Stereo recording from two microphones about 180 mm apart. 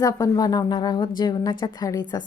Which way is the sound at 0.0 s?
20° left (ahead or behind).